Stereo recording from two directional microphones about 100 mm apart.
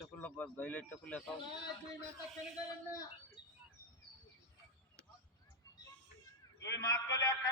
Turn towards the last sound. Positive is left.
turn(degrees=35)  # may be behind; listen again after turning